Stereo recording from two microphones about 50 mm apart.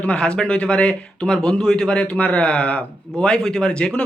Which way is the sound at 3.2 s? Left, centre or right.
Centre.